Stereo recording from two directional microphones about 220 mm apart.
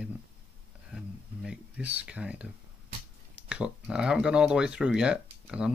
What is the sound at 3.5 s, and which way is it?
Speech, 5° right (ahead or behind).